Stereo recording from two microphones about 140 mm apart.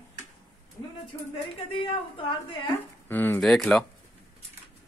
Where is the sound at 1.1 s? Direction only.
20° left (ahead or behind).